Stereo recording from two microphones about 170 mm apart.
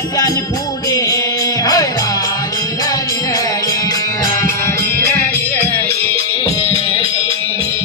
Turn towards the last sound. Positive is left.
turn(degrees=15)  # may be behind; listen again after turning